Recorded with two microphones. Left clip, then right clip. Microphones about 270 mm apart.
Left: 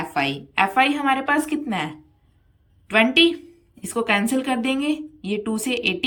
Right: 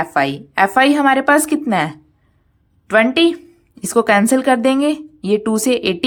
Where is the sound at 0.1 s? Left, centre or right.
Centre.